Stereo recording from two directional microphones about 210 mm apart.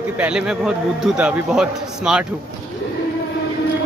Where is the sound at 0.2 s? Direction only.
5° right (ahead or behind).